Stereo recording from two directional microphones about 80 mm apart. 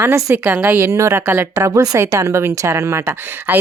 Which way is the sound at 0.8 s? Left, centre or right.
Right.